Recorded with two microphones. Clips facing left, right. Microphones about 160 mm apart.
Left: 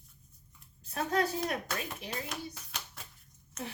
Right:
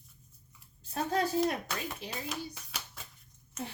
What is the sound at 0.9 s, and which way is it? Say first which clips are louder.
Speech: even; 30° right (ahead or behind).